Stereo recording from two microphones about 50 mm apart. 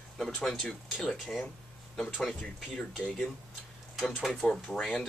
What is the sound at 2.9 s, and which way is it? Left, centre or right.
Speech, centre.